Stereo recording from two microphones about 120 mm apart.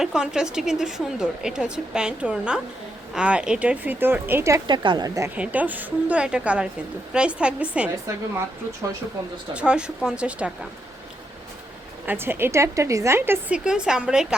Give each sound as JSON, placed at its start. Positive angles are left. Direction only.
{"t": 0.0, "sound": "speech", "side_deg": -5}
{"t": 4.6, "sound": "a woman's voice", "side_deg": -40}
{"t": 5.4, "sound": "speech", "side_deg": -15}
{"t": 9.6, "sound": "speech", "side_deg": -10}
{"t": 12.0, "sound": "speech", "side_deg": -20}
{"t": 13.7, "sound": "speech", "side_deg": -5}